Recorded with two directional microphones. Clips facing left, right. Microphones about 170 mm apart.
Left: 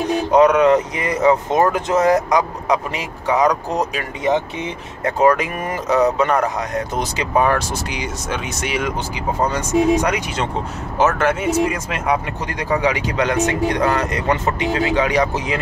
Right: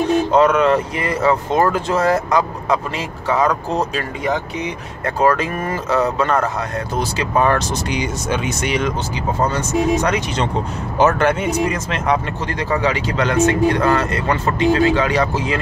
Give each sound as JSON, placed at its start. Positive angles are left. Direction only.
{"t": 0.3, "sound": "speech", "side_deg": 15}